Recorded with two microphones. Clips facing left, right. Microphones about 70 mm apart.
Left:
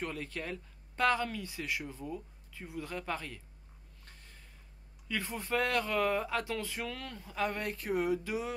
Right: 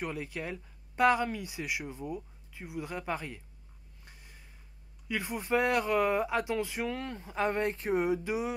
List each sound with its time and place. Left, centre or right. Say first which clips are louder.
0.0 s speech: right 2 dB; centre
4.0 s a sound: right 2 dB; centre
5.0 s speech: right 3 dB; centre